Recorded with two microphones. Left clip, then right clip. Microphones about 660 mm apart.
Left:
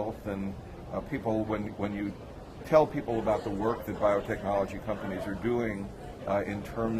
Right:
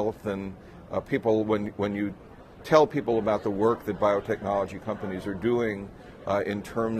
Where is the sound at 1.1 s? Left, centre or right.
Right.